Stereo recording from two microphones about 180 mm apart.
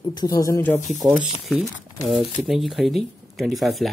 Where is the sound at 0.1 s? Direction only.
20° left (ahead or behind).